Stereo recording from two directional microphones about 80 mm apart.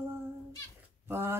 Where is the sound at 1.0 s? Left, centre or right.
Right.